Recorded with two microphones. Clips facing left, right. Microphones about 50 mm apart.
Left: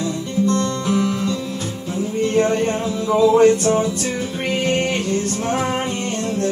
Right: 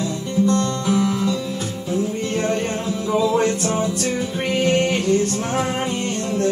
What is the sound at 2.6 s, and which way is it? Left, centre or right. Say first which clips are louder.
Music: left 3 dB; centre.